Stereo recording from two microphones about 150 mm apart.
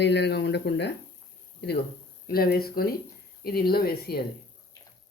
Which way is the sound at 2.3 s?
90° left.